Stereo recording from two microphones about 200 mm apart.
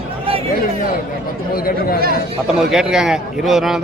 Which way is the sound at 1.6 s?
45° left (ahead or behind).